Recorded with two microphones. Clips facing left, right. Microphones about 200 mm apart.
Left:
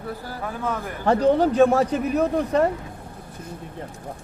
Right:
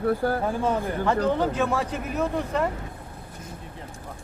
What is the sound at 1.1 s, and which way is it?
Speech, 40° left (ahead or behind).